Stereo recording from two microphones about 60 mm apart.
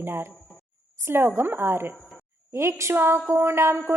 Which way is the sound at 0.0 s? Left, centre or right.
Right.